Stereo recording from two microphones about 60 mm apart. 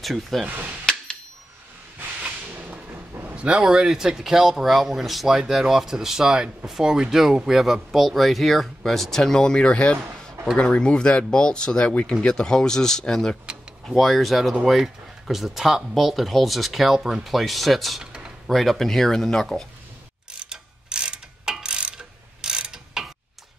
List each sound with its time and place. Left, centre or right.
0.0 s speech: centre
0.5 s hammer: right
2.0 s a sound: right
3.3 s speech: centre
20.4 s mechanisms: centre